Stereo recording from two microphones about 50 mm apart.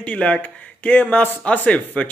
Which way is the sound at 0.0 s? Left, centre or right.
Left.